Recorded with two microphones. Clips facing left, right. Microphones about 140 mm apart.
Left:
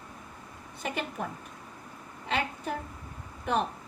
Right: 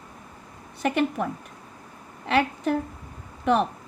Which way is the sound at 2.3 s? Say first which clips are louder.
Right 9 dB; 90° right.